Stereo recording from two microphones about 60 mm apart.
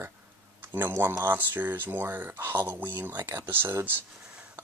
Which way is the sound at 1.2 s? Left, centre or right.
Right.